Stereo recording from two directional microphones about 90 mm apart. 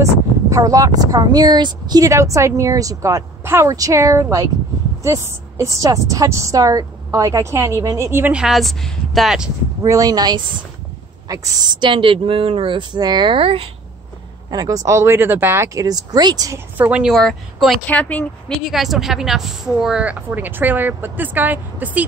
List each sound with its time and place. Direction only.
0.0 s speech: 40° right (ahead or behind)
8.3 s a woman's voice: 10° right (ahead or behind)
8.5 s a woman's voice: centre (ahead or behind)
9.8 s a woman's voice: 40° right (ahead or behind)
11.7 s speech: 65° right (ahead or behind); by 13.7 s 85° right
14.5 s speech: 45° right (ahead or behind)
16.5 s a woman's voice: 20° right (ahead or behind)
17.0 s a woman's voice: 5° left (ahead or behind)
17.8 s speech: 15° left (ahead or behind)
18.6 s a woman's voice: 5° right (ahead or behind); by 22.0 s 20° right (ahead or behind)